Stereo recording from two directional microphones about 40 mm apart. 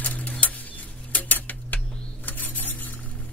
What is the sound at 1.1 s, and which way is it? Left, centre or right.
Tick-tock, left.